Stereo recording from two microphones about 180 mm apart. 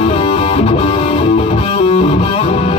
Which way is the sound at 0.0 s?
30° left (ahead or behind).